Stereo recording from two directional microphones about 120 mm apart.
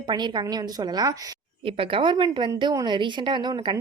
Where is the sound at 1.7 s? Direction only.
45° right (ahead or behind).